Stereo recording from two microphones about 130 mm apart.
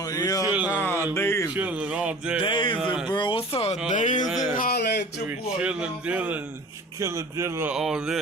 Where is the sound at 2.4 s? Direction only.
40° left (ahead or behind).